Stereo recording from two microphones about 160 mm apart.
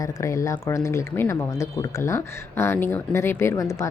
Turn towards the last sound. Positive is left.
turn(degrees=20)  # may be behind; listen again after turning